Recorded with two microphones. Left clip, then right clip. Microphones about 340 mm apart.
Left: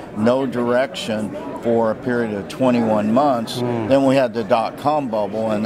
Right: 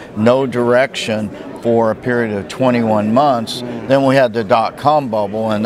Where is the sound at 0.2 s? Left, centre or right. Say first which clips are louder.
Right 5 dB; right.